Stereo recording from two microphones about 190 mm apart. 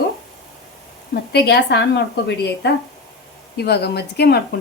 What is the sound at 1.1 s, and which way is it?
Speech, 60° left (ahead or behind).